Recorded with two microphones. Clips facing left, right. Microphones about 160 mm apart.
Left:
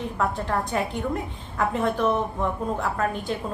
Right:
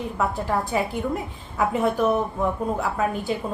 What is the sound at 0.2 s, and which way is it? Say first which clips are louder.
A woman's voice: right 1 dB; 5° right (ahead or behind).